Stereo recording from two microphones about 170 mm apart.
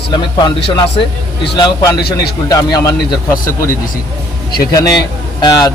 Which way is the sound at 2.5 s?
20° left (ahead or behind).